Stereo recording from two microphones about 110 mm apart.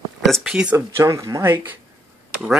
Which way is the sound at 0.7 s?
25° right (ahead or behind).